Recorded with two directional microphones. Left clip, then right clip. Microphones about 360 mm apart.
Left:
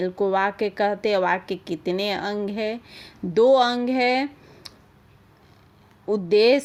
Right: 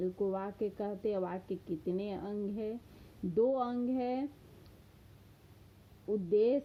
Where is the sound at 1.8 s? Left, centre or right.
Centre.